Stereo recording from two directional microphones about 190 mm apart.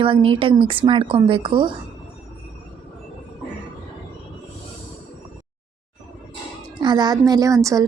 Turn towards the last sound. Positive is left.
turn(degrees=-15)  # may be behind; listen again after turning